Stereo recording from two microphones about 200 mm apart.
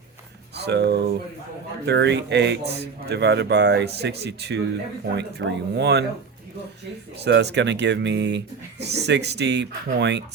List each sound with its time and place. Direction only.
0.5 s speech: 55° right (ahead or behind)
7.2 s speech: 60° right (ahead or behind)